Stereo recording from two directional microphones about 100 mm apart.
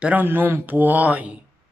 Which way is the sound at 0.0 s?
15° right (ahead or behind).